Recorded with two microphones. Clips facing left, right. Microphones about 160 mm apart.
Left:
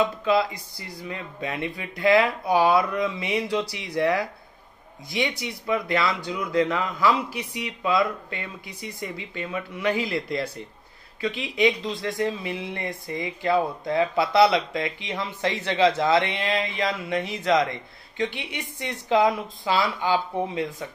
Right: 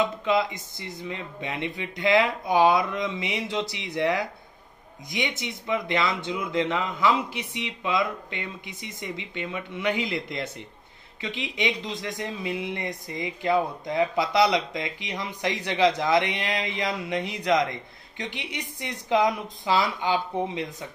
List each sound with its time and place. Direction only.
0.0 s speech: 20° right (ahead or behind)